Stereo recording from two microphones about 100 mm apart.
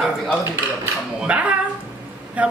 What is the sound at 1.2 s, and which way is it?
Speech, 10° right (ahead or behind).